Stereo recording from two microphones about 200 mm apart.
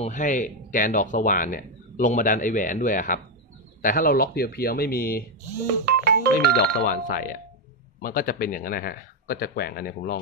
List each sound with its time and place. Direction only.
0.0 s speech: 35° left (ahead or behind)
5.9 s music: 50° right (ahead or behind)
6.5 s speech: 45° left (ahead or behind)